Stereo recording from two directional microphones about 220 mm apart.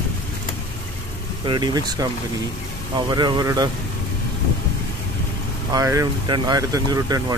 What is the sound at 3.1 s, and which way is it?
Speech, 20° right (ahead or behind).